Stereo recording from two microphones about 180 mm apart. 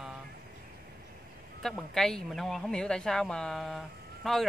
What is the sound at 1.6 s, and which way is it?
Speech, centre (ahead or behind).